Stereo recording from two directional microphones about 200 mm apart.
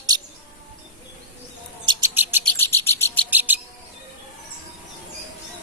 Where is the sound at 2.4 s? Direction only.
10° left (ahead or behind).